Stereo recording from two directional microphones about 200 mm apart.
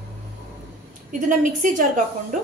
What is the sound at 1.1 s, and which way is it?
A woman's voice, 40° right (ahead or behind).